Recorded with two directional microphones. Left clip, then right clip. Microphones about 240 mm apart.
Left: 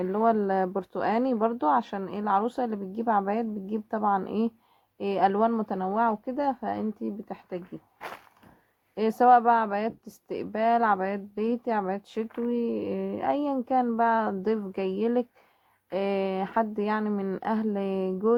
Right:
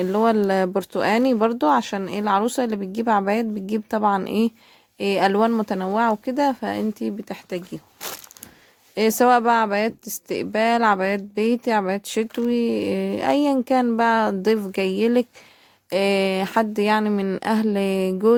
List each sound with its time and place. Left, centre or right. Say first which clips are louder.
0.0 s speech: right 5 dB; right
9.0 s speech: right 3 dB; right